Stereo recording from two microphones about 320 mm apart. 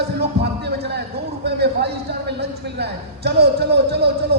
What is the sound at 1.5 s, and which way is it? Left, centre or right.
Speech, right.